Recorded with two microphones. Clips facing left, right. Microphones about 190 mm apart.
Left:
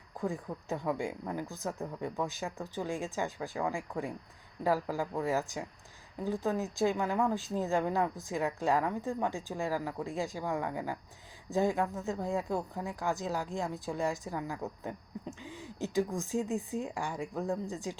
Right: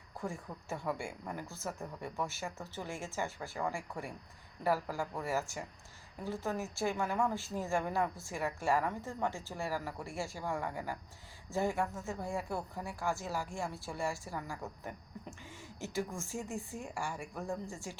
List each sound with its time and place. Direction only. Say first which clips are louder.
0.2 s a woman's voice: left 6 dB; 15° left (ahead or behind)